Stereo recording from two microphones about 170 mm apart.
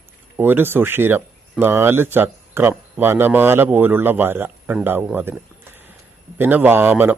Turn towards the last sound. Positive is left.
turn(degrees=-10)  # may be behind; listen again after turning